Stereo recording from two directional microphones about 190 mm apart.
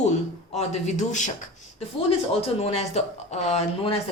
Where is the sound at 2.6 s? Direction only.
35° left (ahead or behind).